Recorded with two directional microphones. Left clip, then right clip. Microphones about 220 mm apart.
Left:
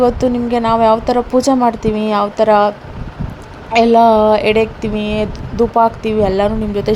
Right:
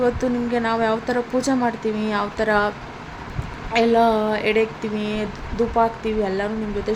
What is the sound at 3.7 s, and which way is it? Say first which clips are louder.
Speech: left 8 dB; 25° left (ahead or behind).